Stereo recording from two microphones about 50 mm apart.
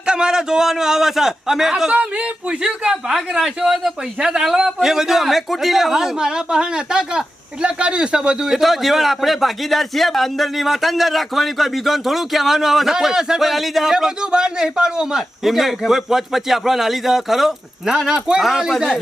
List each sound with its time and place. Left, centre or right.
0.0 s speech: centre
1.9 s speech: right
8.4 s a man's voice: centre
13.9 s a man's voice: centre
17.9 s speech: centre